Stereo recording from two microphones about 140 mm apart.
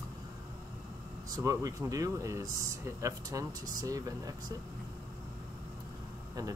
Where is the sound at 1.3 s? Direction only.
25° right (ahead or behind).